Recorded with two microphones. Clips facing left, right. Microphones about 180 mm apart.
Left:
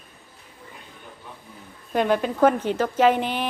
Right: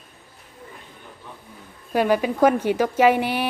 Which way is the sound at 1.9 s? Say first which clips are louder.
Right 2 dB; 10° right (ahead or behind).